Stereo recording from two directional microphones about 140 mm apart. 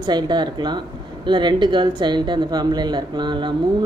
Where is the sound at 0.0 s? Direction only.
30° right (ahead or behind).